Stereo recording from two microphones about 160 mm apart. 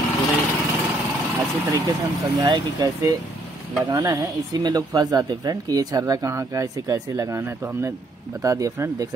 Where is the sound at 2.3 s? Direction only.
25° right (ahead or behind).